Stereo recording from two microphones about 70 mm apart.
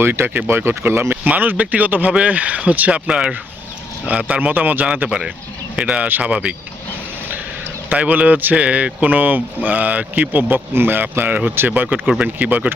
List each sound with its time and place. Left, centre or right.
0.0 s speech: right
1.1 s speech: right
3.1 s speech: centre
5.0 s speech: centre
5.7 s speech: centre
7.9 s speech: right
12.0 s speech: centre
12.4 s speech: right